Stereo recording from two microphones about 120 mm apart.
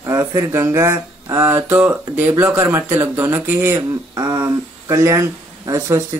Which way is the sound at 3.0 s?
15° right (ahead or behind).